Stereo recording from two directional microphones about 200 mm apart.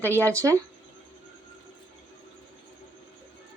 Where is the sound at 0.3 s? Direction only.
15° right (ahead or behind).